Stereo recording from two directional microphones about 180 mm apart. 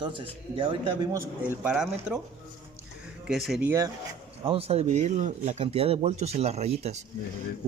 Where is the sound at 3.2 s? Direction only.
5° right (ahead or behind).